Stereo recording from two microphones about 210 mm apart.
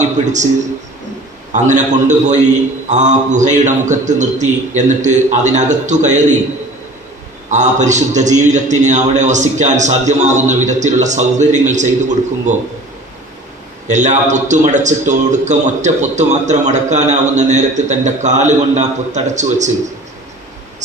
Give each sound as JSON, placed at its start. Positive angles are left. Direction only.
{"t": 1.5, "sound": "a man's voice", "side_deg": -35}
{"t": 7.5, "sound": "a man's voice", "side_deg": -35}
{"t": 13.8, "sound": "a man's voice", "side_deg": -35}